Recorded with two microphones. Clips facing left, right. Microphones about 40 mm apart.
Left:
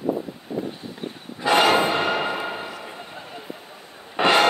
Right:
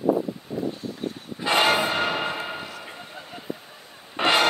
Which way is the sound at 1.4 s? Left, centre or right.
Left.